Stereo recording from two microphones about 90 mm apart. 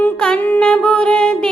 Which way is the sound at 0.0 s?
15° left (ahead or behind).